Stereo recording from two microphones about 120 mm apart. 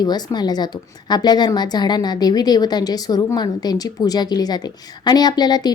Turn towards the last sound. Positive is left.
turn(degrees=35)  # may be behind; listen again after turning